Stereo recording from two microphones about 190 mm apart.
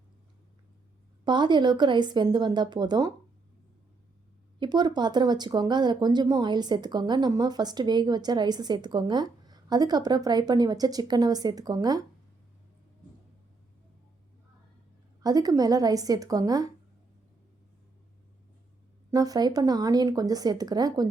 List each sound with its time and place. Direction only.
1.2 s speech: 25° right (ahead or behind)
4.6 s speech: 25° right (ahead or behind)
15.2 s speech: 20° right (ahead or behind)
19.1 s speech: 20° right (ahead or behind)